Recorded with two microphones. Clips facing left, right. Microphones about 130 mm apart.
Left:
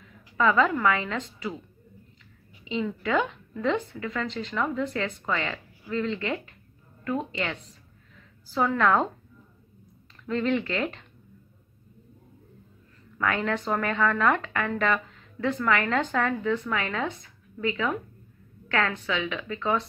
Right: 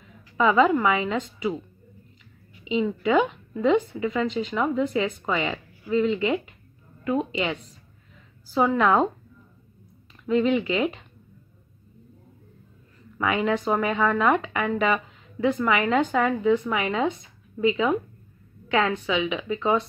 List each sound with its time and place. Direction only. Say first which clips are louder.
0.4 s a woman's voice: right 3 dB; 15° right (ahead or behind)
2.6 s a woman's voice: right 5 dB; 10° right (ahead or behind)
8.5 s a woman's voice: right 3 dB; 15° right (ahead or behind)
10.2 s a woman's voice: right 5 dB; 10° right (ahead or behind)
13.2 s a woman's voice: right 3 dB; 10° right (ahead or behind)